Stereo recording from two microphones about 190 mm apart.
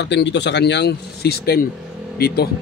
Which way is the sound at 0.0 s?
70° left (ahead or behind).